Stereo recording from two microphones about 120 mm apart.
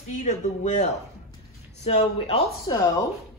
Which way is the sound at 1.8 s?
55° left (ahead or behind).